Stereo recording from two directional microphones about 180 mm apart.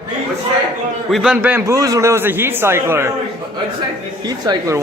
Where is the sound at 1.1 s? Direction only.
5° right (ahead or behind).